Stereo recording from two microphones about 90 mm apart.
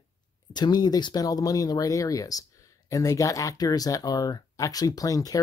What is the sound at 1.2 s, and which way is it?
Speech, 40° left (ahead or behind).